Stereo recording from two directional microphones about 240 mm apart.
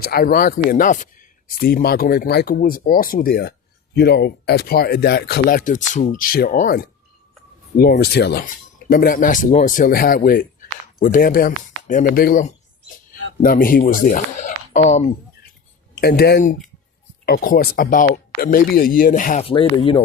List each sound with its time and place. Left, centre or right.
0.0 s speech: left
16.0 s speech: left